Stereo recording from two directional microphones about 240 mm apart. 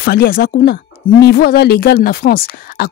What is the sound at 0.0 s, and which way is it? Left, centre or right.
Speech, left.